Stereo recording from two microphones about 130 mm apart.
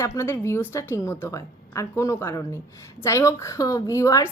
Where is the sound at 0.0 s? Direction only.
20° left (ahead or behind).